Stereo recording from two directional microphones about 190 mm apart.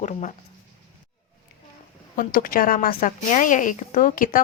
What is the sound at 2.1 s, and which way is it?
A woman's voice, 50° left (ahead or behind).